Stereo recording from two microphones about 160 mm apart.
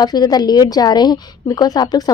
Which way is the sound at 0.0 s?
25° left (ahead or behind).